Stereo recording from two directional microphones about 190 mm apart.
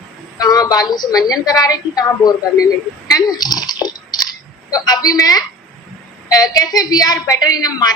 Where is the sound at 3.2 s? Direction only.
20° left (ahead or behind).